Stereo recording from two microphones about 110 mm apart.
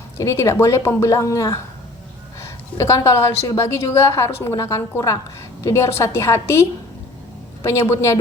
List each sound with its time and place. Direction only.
0.2 s a woman's voice: 25° left (ahead or behind)
2.7 s a woman's voice: 25° left (ahead or behind)